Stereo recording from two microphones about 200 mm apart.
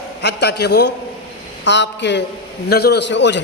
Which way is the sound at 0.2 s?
55° left (ahead or behind).